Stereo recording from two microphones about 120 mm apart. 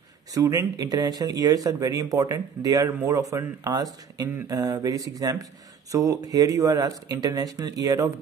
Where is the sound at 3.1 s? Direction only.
30° right (ahead or behind).